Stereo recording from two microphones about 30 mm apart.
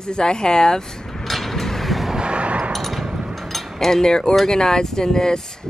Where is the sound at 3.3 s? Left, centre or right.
Centre.